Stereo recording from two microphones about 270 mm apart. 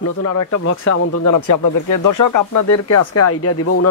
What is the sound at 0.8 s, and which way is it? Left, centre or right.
Speech, left.